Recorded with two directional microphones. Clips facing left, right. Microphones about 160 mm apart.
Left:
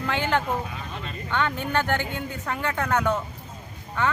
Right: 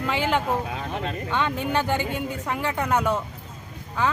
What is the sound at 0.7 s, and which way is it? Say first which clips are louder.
Speech: right 6 dB; 75° right (ahead or behind).